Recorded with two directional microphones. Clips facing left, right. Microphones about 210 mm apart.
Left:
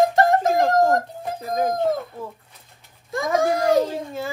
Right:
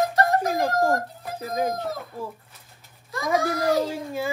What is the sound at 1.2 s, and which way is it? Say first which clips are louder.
Music: left 2 dB; 50° left (ahead or behind).